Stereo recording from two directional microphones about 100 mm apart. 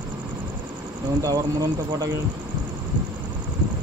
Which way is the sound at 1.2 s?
35° right (ahead or behind).